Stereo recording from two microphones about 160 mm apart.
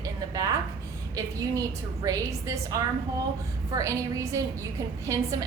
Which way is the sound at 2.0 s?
20° right (ahead or behind).